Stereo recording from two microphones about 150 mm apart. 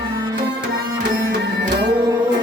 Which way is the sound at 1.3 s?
70° right (ahead or behind).